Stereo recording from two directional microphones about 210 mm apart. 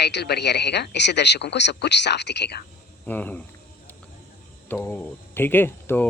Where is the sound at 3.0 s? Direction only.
10° left (ahead or behind).